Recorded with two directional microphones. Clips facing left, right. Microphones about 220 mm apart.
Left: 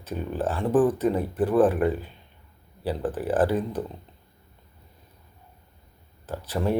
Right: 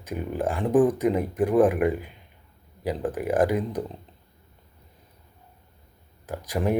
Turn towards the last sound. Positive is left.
turn(degrees=-15)  # may be behind; listen again after turning